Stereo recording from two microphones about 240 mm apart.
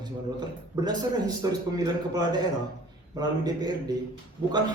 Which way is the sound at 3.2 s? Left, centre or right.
Centre.